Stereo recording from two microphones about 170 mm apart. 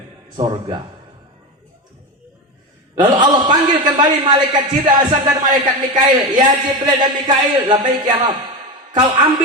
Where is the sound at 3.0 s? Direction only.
25° right (ahead or behind).